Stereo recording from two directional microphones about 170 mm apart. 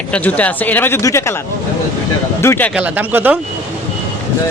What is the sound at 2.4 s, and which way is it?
Speech, 15° left (ahead or behind).